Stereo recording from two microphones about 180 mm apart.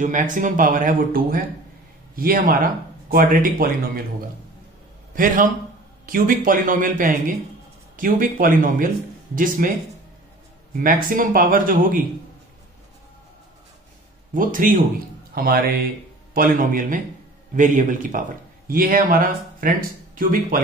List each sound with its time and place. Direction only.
0.0 s speech: 45° right (ahead or behind)
5.1 s speech: 50° right (ahead or behind)
11.1 s speech: 50° right (ahead or behind)
14.3 s speech: 50° right (ahead or behind)